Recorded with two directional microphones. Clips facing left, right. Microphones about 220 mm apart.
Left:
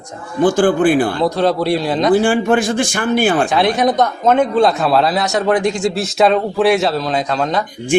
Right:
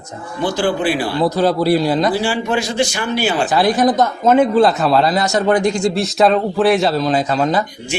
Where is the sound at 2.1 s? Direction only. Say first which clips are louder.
Left 5 dB; 50° left (ahead or behind).